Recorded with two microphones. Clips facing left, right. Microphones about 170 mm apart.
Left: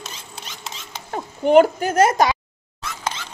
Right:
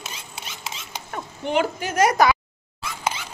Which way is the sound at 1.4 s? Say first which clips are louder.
Left 10 dB; 45° left (ahead or behind).